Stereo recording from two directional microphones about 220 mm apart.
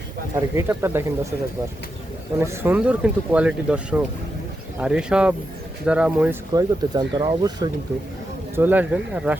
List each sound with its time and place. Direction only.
0.3 s speech: 10° right (ahead or behind)
2.4 s speech: 10° right (ahead or behind)
6.5 s speech: 15° right (ahead or behind)